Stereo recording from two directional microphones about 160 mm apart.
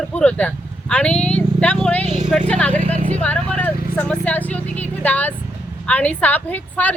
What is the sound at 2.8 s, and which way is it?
Speech, 45° right (ahead or behind).